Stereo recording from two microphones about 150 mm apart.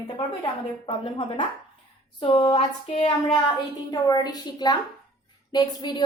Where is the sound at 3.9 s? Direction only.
25° left (ahead or behind).